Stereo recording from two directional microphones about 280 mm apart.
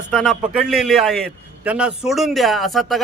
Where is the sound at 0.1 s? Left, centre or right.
Centre.